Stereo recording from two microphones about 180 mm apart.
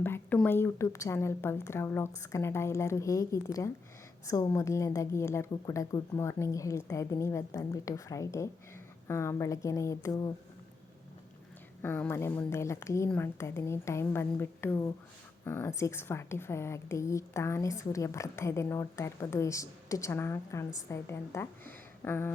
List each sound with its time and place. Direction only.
0.0 s a sound: 10° left (ahead or behind)
0.4 s a woman's voice: 10° left (ahead or behind)
11.8 s a woman's voice: 10° left (ahead or behind)